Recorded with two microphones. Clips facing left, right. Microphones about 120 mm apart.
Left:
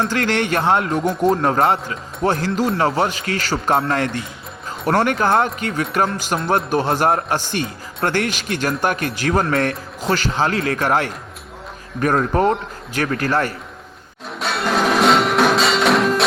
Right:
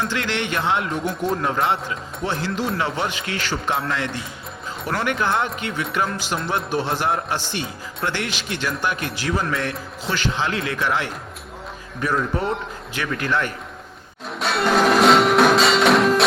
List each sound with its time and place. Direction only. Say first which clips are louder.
0.1 s speech: left 5 dB; 45° left (ahead or behind)
14.3 s music: right 1 dB; centre (ahead or behind)